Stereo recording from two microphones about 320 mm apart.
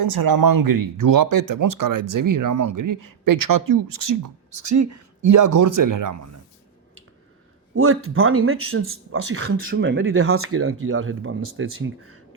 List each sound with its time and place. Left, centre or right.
0.0 s speech: right
7.8 s speech: right